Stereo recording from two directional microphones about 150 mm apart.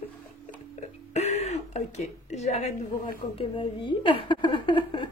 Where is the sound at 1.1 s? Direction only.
45° left (ahead or behind).